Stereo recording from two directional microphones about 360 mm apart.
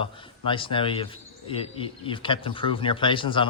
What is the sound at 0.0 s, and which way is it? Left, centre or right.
A man's voice, centre.